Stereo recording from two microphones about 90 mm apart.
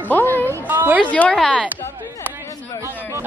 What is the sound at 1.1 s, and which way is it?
Speech, 10° left (ahead or behind).